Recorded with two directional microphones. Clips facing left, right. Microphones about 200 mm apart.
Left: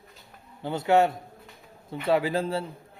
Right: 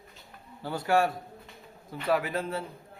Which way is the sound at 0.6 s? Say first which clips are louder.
Left 4 dB; 20° left (ahead or behind).